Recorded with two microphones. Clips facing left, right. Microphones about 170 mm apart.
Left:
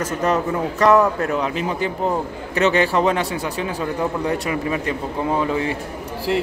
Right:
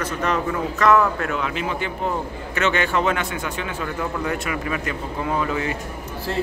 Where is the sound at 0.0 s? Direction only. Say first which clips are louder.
Left 3 dB; 40° left (ahead or behind).